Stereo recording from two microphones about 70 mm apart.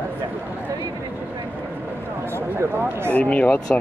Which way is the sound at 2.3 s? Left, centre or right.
Right.